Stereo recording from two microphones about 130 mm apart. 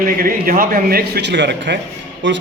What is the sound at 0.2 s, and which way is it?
Speech, 90° right.